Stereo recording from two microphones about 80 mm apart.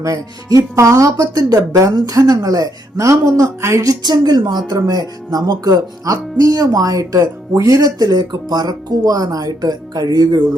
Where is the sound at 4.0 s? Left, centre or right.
Right.